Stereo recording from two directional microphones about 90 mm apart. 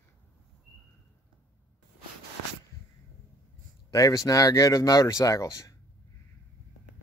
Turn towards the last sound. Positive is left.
turn(degrees=35)  # may be behind; listen again after turning